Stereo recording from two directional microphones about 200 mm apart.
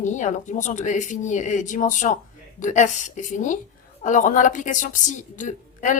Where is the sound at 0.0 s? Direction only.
35° left (ahead or behind).